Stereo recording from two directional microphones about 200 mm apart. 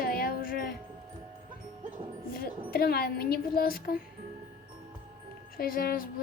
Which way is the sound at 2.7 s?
50° left (ahead or behind).